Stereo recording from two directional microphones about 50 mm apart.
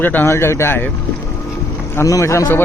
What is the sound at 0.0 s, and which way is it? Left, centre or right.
Speech, left.